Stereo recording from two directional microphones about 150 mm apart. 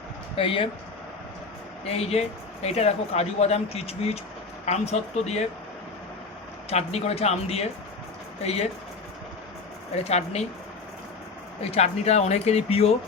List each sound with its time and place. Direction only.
0.3 s speech: 40° left (ahead or behind)
1.9 s speech: 45° left (ahead or behind)
6.7 s speech: 45° left (ahead or behind)
9.9 s speech: 45° left (ahead or behind)
11.6 s speech: 45° left (ahead or behind)